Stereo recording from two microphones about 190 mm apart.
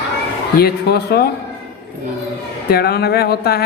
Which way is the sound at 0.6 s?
55° left (ahead or behind).